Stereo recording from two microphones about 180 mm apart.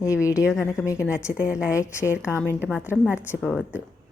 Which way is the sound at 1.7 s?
15° left (ahead or behind).